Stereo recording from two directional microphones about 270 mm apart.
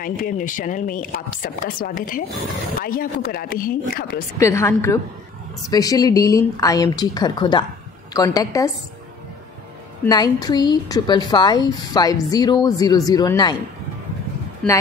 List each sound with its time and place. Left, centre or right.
0.0 s speech: left
4.4 s a woman's voice: centre
10.0 s a woman's voice: centre